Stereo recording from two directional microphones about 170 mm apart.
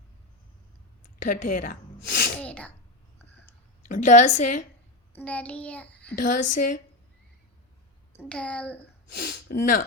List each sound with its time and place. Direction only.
1.2 s speech: 50° left (ahead or behind)
2.4 s sneeze: 10° left (ahead or behind)
3.8 s a woman's voice: 50° left (ahead or behind)
5.1 s child singing: 10° left (ahead or behind)
6.1 s a woman's voice: 50° left (ahead or behind)
8.1 s speech: 10° left (ahead or behind)
9.1 s speech: 65° left (ahead or behind)